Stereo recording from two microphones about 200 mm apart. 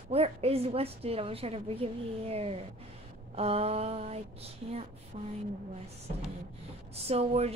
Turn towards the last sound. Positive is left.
turn(degrees=-30)  # may be behind; listen again after turning